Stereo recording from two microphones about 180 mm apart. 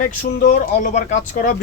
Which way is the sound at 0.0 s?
50° left (ahead or behind).